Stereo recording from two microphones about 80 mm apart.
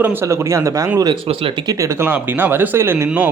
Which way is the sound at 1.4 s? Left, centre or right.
Right.